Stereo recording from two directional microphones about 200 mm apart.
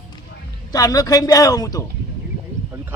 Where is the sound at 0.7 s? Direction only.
15° left (ahead or behind).